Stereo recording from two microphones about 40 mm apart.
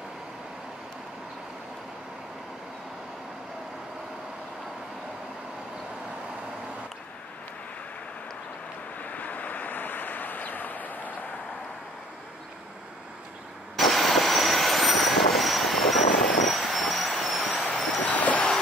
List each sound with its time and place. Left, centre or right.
9.0 s vehicle: left
13.7 s vehicle: centre
18.0 s vehicle: left